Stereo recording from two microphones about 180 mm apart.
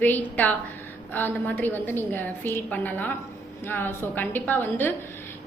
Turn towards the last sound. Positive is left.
turn(degrees=10)  # may be behind; listen again after turning